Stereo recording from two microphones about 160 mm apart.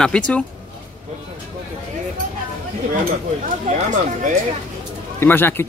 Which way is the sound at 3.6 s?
50° right (ahead or behind).